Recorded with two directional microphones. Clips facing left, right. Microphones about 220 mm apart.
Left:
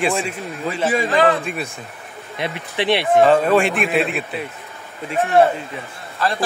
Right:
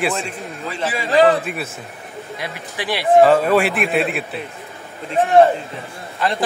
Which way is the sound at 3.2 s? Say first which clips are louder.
Left 1 dB; 5° right (ahead or behind).